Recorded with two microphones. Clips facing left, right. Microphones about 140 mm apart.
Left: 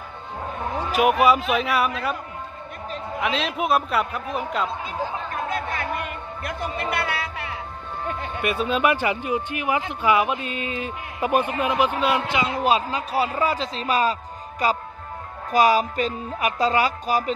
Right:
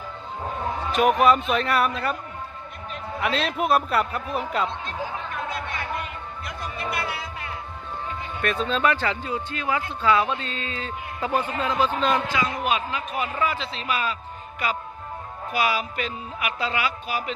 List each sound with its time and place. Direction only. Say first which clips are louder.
0.9 s a man's voice: left 1 dB; 5° left (ahead or behind)
3.2 s a man's voice: even; centre (ahead or behind)
5.3 s music: left 3 dB; 55° left (ahead or behind)
8.4 s speech: left 1 dB; 10° left (ahead or behind)
12.3 s a man's voice: left 4 dB; 25° left (ahead or behind)
15.5 s a man's voice: left 7 dB; 40° left (ahead or behind)